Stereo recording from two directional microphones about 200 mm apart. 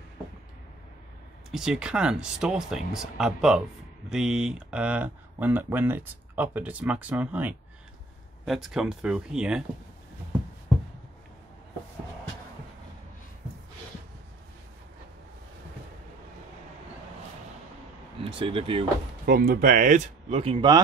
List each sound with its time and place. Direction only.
1.5 s speech: 5° right (ahead or behind)
18.2 s speech: 25° right (ahead or behind)
19.2 s speech: 45° right (ahead or behind); by 20.8 s 25° right (ahead or behind)